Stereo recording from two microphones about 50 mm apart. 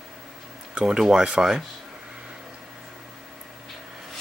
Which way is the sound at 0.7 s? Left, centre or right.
Centre.